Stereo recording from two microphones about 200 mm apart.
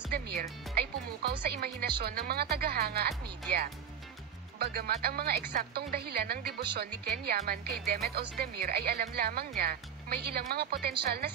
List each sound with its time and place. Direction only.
0.1 s speech: 50° right (ahead or behind)
4.6 s speech: 50° right (ahead or behind)